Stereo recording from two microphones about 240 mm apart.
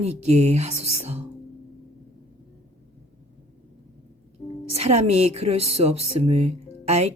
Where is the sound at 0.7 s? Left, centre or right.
Right.